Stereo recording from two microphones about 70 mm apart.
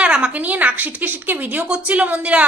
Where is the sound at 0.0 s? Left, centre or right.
Centre.